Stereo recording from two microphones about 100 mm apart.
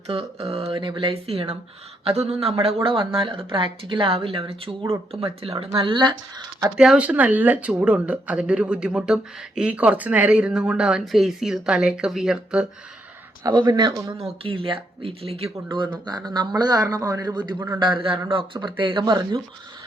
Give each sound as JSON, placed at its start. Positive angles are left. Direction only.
{"t": 0.1, "sound": "speech", "side_deg": -75}
{"t": 2.0, "sound": "speech", "side_deg": -90}
{"t": 2.8, "sound": "speech", "side_deg": -65}
{"t": 6.7, "sound": "speech", "side_deg": -10}
{"t": 13.5, "sound": "a man's voice", "side_deg": -50}
{"t": 14.4, "sound": "speech", "side_deg": -65}
{"t": 16.0, "sound": "a man's voice", "side_deg": -45}